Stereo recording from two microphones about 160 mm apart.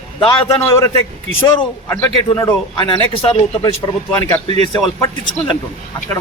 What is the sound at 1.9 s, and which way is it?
Speech, 20° left (ahead or behind).